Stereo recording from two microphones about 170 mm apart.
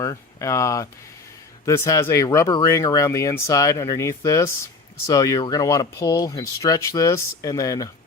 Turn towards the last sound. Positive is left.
turn(degrees=20)  # may be behind; listen again after turning